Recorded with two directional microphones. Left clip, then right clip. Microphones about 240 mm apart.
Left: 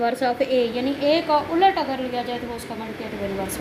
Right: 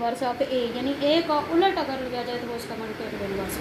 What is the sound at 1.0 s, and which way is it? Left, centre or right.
Speech, left.